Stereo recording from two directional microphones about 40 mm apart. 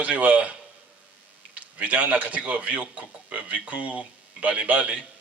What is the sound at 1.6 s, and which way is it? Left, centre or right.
A man's voice, right.